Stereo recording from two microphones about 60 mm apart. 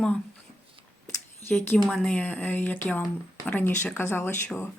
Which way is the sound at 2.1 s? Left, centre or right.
Left.